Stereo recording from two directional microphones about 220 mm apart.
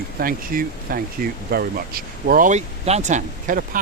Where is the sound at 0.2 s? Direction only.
40° right (ahead or behind).